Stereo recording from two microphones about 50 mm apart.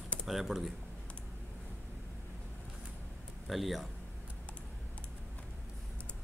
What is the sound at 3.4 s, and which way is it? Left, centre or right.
Speech, centre.